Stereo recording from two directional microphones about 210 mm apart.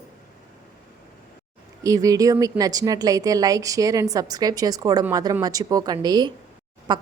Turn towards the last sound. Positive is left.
turn(degrees=-20)  # may be behind; listen again after turning